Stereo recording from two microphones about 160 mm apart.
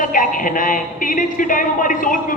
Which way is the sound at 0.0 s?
55° left (ahead or behind).